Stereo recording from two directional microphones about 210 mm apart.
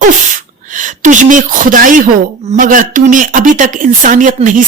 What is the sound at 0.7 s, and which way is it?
Speech, 40° right (ahead or behind).